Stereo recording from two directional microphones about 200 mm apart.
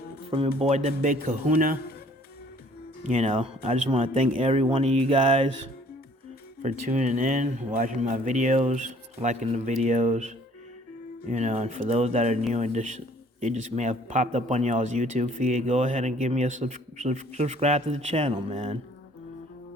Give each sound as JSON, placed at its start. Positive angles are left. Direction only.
{"t": 0.3, "sound": "speech", "side_deg": -30}
{"t": 3.0, "sound": "speech", "side_deg": -35}
{"t": 6.6, "sound": "speech", "side_deg": -35}